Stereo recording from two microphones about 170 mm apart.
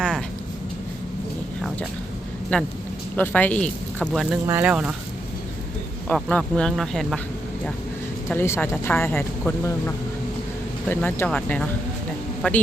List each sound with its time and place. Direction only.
2.5 s speech: 5° left (ahead or behind)
6.1 s speech: 5° left (ahead or behind)
8.3 s speech: 15° left (ahead or behind)